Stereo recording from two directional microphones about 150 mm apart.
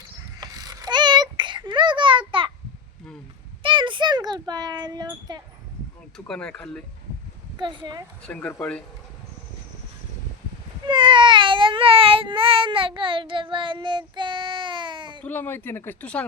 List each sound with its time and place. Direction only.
0.3 s a sound: 25° right (ahead or behind)
3.6 s a child's voice: 35° right (ahead or behind)
6.1 s speech: 5° left (ahead or behind)
7.5 s speech: 30° right (ahead or behind)
8.2 s speech: 10° left (ahead or behind)
10.8 s baby cry: 35° right (ahead or behind)
15.2 s speech: 10° left (ahead or behind)